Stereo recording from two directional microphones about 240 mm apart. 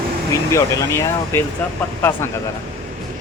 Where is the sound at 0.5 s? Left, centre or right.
Centre.